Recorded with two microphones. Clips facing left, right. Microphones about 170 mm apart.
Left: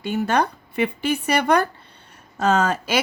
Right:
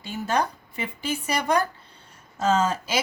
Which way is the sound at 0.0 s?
65° left (ahead or behind).